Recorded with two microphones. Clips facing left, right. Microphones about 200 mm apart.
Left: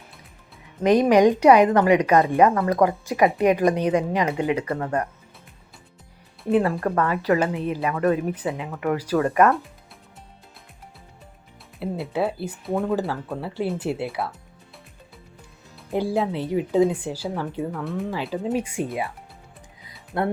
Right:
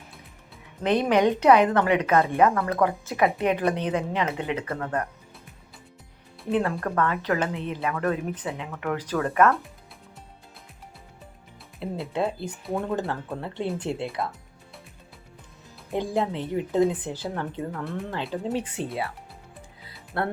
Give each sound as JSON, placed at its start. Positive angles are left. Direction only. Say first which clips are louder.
{"t": 0.8, "sound": "speech", "louder": "left 5 dB", "side_deg": 10}
{"t": 6.7, "sound": "speech", "louder": "left 3 dB", "side_deg": 10}
{"t": 7.9, "sound": "speech", "louder": "left 7 dB", "side_deg": 20}
{"t": 11.8, "sound": "speech", "louder": "left 3 dB", "side_deg": 5}
{"t": 15.9, "sound": "speech", "louder": "left 3 dB", "side_deg": 5}
{"t": 19.8, "sound": "music", "louder": "left 4 dB", "side_deg": 15}